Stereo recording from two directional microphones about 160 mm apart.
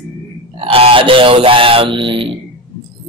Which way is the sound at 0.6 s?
35° right (ahead or behind).